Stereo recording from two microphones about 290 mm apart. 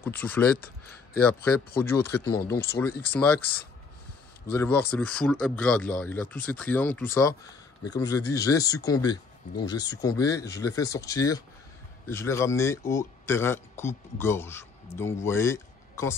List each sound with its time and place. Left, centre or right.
0.0 s speech: centre
2.4 s speech: left
2.8 s speech: centre
4.5 s speech: centre